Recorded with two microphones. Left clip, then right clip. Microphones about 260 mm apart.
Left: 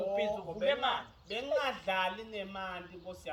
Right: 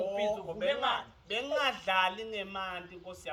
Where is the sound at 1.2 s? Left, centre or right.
Centre.